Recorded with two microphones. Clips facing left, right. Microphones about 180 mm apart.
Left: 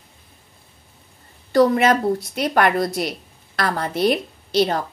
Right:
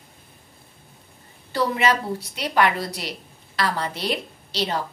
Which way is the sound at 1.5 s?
50° left (ahead or behind).